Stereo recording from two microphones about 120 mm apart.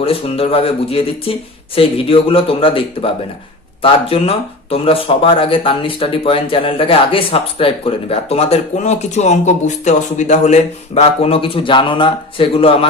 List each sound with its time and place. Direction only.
0.0 s speech: 55° left (ahead or behind)